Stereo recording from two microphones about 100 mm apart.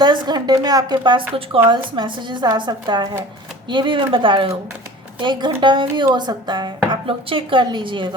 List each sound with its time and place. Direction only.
0.0 s a woman's voice: 45° right (ahead or behind)
6.9 s speech: 60° right (ahead or behind)